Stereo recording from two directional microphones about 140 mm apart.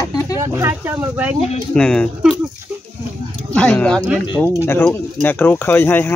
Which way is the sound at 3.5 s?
5° left (ahead or behind).